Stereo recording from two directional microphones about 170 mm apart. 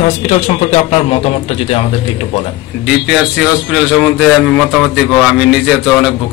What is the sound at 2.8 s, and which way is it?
Speech, 5° right (ahead or behind).